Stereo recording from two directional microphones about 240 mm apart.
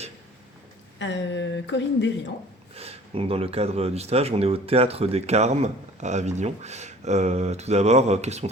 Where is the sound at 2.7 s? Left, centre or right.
Right.